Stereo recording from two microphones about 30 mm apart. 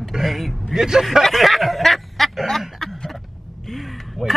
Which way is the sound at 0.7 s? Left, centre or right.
Centre.